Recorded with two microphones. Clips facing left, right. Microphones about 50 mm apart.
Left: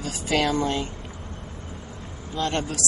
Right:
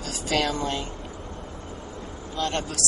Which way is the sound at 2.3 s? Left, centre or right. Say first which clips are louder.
Left 2 dB; centre.